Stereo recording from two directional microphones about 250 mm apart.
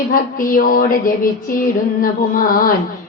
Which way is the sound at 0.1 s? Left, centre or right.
Left.